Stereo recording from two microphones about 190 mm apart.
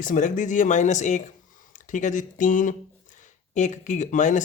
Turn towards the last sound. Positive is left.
turn(degrees=40)  # may be behind; listen again after turning